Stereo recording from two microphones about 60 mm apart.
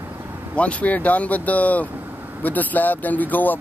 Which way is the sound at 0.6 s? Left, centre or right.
Left.